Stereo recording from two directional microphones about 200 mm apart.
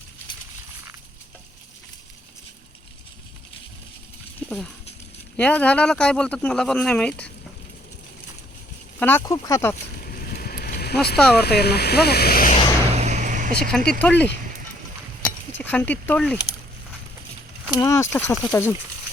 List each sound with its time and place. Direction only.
4.4 s speech: 5° left (ahead or behind)
9.0 s speech: 10° left (ahead or behind)
10.0 s boat: 50° left (ahead or behind)
11.3 s speech: 55° left (ahead or behind)
12.9 s vehicle: 35° right (ahead or behind)
13.7 s speech: 5° left (ahead or behind)
15.2 s keys jangling: 10° left (ahead or behind)
17.7 s speech: 20° left (ahead or behind)